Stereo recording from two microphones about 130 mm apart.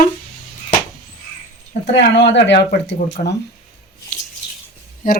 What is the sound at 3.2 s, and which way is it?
Speech, 90° left.